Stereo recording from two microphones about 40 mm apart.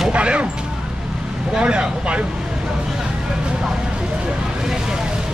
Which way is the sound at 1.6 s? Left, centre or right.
Right.